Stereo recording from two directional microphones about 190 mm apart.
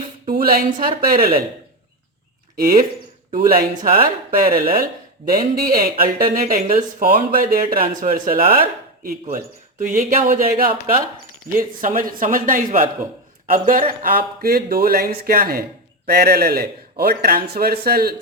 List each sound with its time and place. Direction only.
0.3 s speech: 50° right (ahead or behind)
2.6 s speech: 50° right (ahead or behind)